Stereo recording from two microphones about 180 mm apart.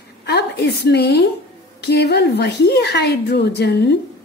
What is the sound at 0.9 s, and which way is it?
A woman's voice, 65° left (ahead or behind).